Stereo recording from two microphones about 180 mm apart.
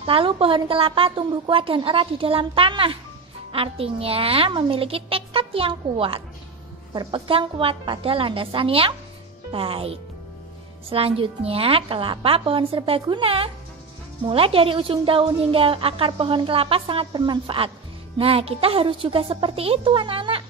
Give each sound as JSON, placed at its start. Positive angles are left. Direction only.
{"t": 0.0, "sound": "a woman's voice", "side_deg": -30}